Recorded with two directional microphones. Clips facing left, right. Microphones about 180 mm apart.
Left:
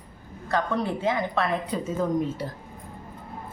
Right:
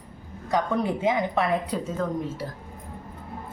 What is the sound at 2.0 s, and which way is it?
Speech, 20° left (ahead or behind).